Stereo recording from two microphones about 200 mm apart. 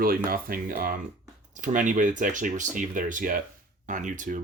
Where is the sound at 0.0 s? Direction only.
45° right (ahead or behind).